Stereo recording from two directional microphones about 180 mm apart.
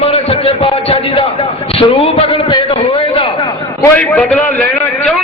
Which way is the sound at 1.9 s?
30° left (ahead or behind).